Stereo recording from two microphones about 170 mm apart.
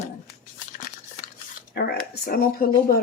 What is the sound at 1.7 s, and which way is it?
Speech, 75° left (ahead or behind).